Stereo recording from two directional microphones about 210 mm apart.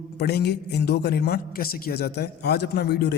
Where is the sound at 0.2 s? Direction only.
50° left (ahead or behind).